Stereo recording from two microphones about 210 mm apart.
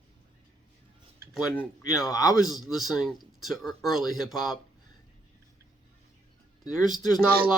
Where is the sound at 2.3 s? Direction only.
Centre (ahead or behind).